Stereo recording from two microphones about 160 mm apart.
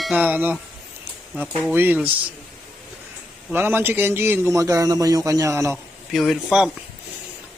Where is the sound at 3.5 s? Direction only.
10° right (ahead or behind).